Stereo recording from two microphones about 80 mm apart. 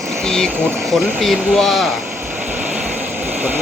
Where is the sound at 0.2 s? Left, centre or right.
Centre.